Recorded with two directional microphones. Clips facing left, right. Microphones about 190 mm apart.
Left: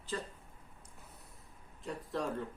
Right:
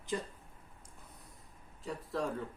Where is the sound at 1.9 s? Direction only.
Centre (ahead or behind).